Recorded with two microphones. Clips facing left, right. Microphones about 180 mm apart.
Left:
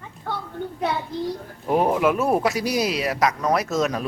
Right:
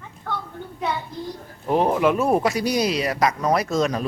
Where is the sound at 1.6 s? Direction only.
5° left (ahead or behind).